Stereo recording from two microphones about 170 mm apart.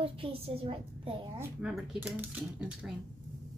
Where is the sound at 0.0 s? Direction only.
35° right (ahead or behind).